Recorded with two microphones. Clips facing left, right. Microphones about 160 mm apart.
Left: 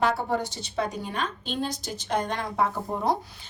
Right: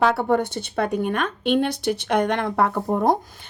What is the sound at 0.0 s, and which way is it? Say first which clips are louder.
A woman's voice: right 6 dB; 65° right (ahead or behind).